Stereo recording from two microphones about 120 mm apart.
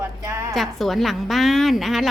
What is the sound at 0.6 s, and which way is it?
A woman's voice, centre (ahead or behind).